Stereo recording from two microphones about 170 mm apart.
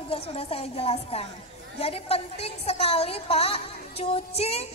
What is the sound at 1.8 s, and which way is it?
A woman's voice, 35° left (ahead or behind).